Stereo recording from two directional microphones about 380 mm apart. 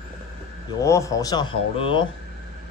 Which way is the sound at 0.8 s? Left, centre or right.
Centre.